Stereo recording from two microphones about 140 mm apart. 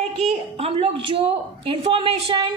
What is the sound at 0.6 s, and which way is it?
A woman's voice, 40° right (ahead or behind).